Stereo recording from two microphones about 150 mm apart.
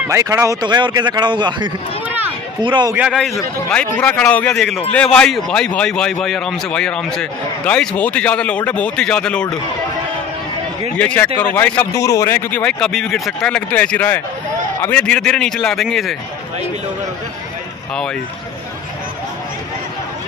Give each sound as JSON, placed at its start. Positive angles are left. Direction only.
{"t": 0.1, "sound": "a man's voice", "side_deg": -20}
{"t": 3.1, "sound": "a man's voice", "side_deg": 0}
{"t": 11.0, "sound": "a man's voice", "side_deg": 10}
{"t": 11.9, "sound": "a man's voice", "side_deg": 20}